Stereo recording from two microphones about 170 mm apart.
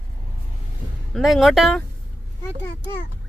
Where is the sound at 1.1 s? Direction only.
Centre (ahead or behind).